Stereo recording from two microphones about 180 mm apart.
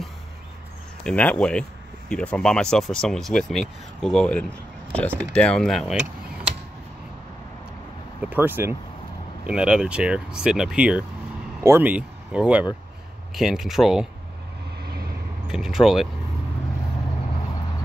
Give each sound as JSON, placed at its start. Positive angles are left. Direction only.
{"t": 1.0, "sound": "speech", "side_deg": 10}
{"t": 8.2, "sound": "speech", "side_deg": -10}
{"t": 14.8, "sound": "vehicle", "side_deg": -65}
{"t": 15.4, "sound": "speech", "side_deg": -5}